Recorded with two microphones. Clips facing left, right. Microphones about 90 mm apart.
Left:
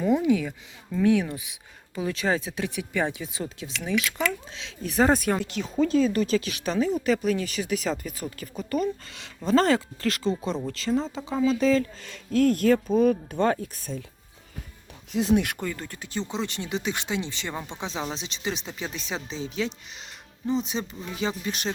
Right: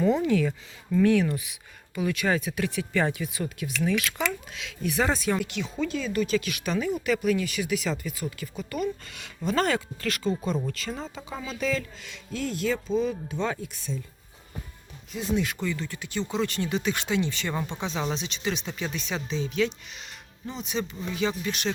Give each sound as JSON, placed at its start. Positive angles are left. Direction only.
{"t": 0.0, "sound": "speech", "side_deg": 15}
{"t": 15.1, "sound": "speech", "side_deg": 70}
{"t": 15.6, "sound": "speech", "side_deg": 45}
{"t": 16.3, "sound": "speech", "side_deg": 20}